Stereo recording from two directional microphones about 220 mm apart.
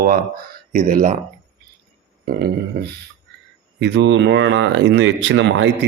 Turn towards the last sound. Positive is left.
turn(degrees=-55)  # may be behind; listen again after turning